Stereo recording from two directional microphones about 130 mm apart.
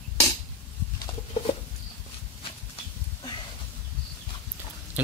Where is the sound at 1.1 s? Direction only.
40° left (ahead or behind).